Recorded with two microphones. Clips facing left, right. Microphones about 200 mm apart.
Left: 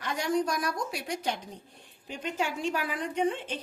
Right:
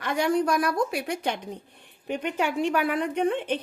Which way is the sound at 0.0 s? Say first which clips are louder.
Right 5 dB; 60° right (ahead or behind).